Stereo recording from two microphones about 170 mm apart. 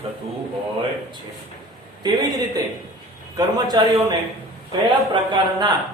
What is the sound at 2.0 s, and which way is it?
Speech, 25° right (ahead or behind).